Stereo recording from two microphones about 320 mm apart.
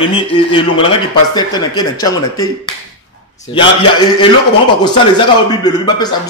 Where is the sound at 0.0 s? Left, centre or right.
Centre.